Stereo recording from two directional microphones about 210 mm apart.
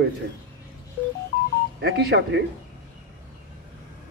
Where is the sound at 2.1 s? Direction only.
55° right (ahead or behind).